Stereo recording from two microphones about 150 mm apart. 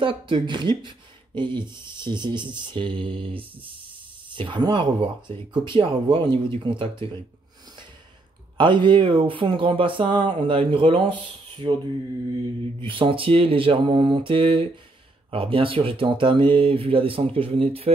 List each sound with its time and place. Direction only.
0.0 s speech: 35° right (ahead or behind)
8.5 s speech: 30° right (ahead or behind)
12.8 s speech: 35° right (ahead or behind)